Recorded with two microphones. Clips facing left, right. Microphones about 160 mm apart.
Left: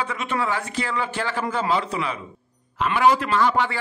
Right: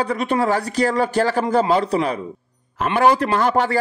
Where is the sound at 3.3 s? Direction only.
45° right (ahead or behind).